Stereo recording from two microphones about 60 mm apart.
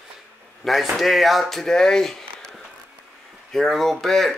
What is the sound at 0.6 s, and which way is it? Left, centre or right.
Speech, centre.